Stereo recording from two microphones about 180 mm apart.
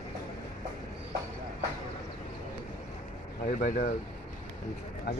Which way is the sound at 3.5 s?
45° left (ahead or behind).